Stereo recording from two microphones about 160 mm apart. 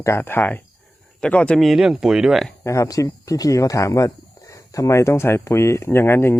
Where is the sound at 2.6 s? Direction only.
20° left (ahead or behind).